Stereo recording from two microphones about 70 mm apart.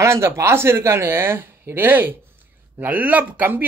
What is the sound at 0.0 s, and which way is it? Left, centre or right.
Speech, right.